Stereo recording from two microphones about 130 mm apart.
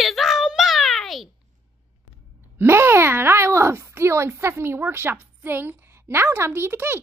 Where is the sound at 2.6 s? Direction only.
15° right (ahead or behind).